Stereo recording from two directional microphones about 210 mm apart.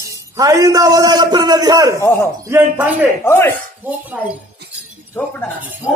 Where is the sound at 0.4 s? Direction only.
15° right (ahead or behind).